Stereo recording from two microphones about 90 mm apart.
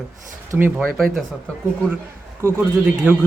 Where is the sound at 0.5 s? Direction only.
25° right (ahead or behind).